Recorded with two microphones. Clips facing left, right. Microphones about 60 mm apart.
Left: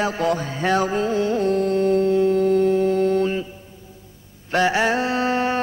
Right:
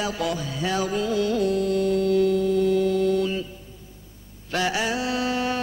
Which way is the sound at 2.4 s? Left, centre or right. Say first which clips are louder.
Left 3 dB; left.